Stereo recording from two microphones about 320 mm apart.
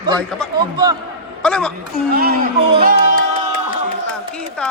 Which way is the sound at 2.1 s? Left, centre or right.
Right.